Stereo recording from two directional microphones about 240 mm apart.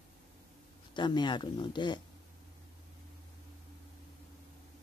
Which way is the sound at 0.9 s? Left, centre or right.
Centre.